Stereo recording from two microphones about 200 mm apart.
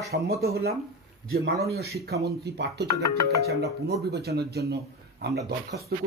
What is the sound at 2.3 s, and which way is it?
Speech, 55° right (ahead or behind).